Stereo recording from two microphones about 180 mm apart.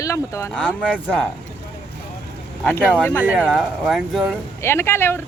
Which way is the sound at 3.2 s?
10° right (ahead or behind).